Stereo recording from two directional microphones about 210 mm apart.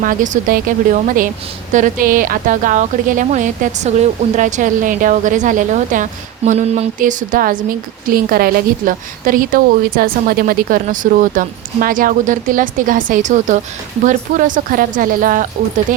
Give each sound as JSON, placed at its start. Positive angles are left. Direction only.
{"t": 0.0, "sound": "a woman's voice", "side_deg": -40}